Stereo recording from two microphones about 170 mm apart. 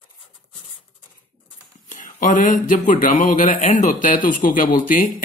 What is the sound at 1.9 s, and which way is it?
Speech, 50° left (ahead or behind).